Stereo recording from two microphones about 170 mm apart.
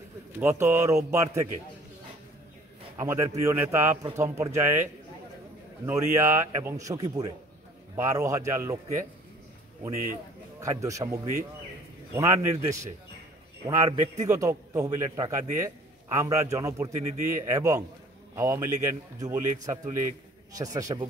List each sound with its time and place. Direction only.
0.4 s a man's voice: 15° right (ahead or behind)
3.0 s a man's voice: 20° right (ahead or behind)
5.9 s a man's voice: 15° right (ahead or behind)
10.6 s a man's voice: 20° right (ahead or behind)